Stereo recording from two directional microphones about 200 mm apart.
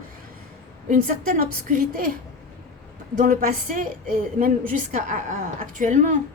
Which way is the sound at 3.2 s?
45° right (ahead or behind).